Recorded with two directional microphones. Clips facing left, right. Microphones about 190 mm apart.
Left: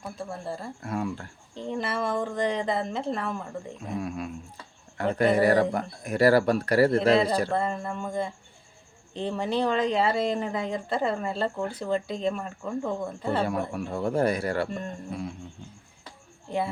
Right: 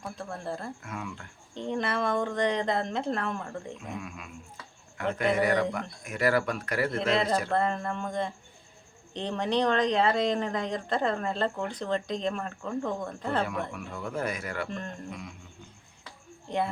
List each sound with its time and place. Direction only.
0.0 s speech: 5° left (ahead or behind)
0.8 s speech: 35° left (ahead or behind)
1.5 s speech: centre (ahead or behind)
3.8 s speech: 35° left (ahead or behind)
7.5 s speech: 5° left (ahead or behind)
13.7 s speech: 35° left (ahead or behind)
16.5 s speech: 5° left (ahead or behind)